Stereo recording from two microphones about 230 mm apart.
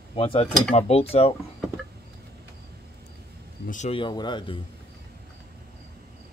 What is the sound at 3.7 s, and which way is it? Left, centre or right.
Speech, left.